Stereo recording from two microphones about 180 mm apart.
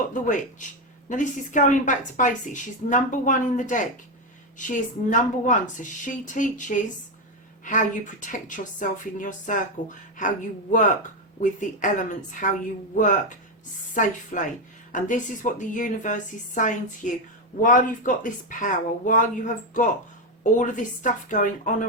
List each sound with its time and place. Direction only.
0.1 s a woman's voice: 45° left (ahead or behind)
13.9 s a woman's voice: 45° left (ahead or behind)